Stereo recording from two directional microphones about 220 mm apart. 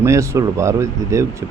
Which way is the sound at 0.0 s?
15° right (ahead or behind).